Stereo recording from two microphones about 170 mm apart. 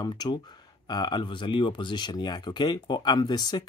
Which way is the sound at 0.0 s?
25° left (ahead or behind).